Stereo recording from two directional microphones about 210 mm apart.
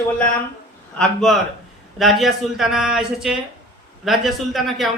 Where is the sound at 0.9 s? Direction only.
5° left (ahead or behind).